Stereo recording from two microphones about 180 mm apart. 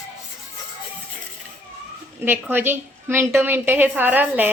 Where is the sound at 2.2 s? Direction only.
10° right (ahead or behind).